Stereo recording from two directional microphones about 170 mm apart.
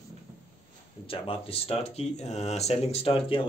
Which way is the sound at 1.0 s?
35° left (ahead or behind).